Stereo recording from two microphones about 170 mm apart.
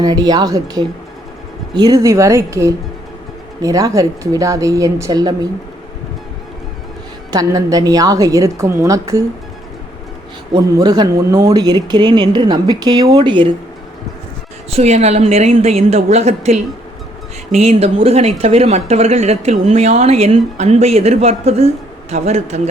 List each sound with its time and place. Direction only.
0.0 s speech: 25° right (ahead or behind)
7.3 s speech: 20° right (ahead or behind)
10.5 s speech: 20° right (ahead or behind)
14.7 s speech: 40° right (ahead or behind)